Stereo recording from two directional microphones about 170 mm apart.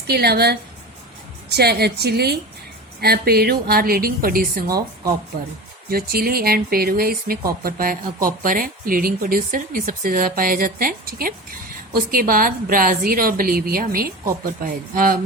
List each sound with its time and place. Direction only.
0.1 s a woman's voice: 70° right (ahead or behind)
1.5 s a woman's voice: 70° right (ahead or behind)
5.9 s speech: 60° right (ahead or behind)